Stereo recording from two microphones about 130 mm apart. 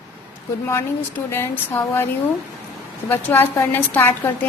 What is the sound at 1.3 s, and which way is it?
Speech, 15° left (ahead or behind).